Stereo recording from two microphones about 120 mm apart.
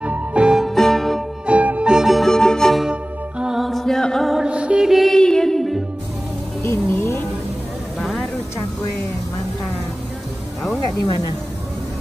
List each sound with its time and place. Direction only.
0.0 s music: 10° right (ahead or behind)
1.4 s music: 10° right (ahead or behind)
6.6 s music: 25° left (ahead or behind)
8.0 s a sound: centre (ahead or behind)